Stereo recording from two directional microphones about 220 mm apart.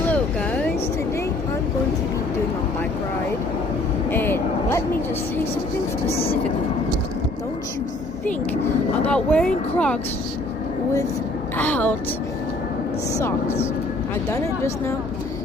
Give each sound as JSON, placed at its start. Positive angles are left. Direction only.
{"t": 0.1, "sound": "a sound", "side_deg": 5}
{"t": 4.1, "sound": "vehicle", "side_deg": 10}
{"t": 6.1, "sound": "vehicle", "side_deg": 25}
{"t": 9.0, "sound": "speech", "side_deg": 5}
{"t": 11.5, "sound": "a woman's voice", "side_deg": 5}
{"t": 14.3, "sound": "a woman's voice", "side_deg": 10}